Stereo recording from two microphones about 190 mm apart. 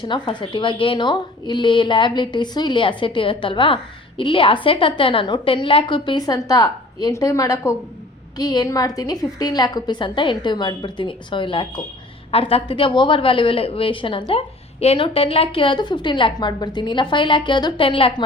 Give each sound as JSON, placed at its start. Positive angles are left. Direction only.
{"t": 0.0, "sound": "a woman's voice", "side_deg": 25}